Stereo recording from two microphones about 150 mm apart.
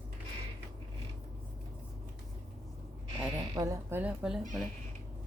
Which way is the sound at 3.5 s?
20° right (ahead or behind).